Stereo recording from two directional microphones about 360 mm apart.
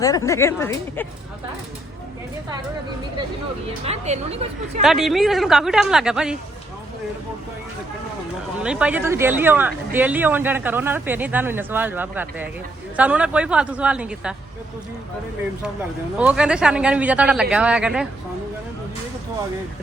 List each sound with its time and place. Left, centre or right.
0.0 s speech: centre
3.8 s a woman's voice: centre
4.8 s speech: centre
8.6 s speech: centre
16.1 s speech: centre